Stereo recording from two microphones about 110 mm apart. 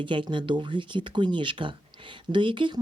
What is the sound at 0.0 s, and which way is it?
Speech, 50° right (ahead or behind).